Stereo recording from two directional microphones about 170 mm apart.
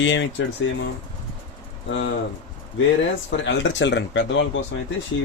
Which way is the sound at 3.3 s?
90° left.